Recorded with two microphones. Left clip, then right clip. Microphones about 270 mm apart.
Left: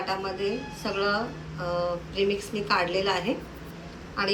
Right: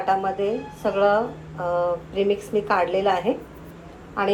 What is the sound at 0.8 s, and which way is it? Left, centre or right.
A man's voice, centre.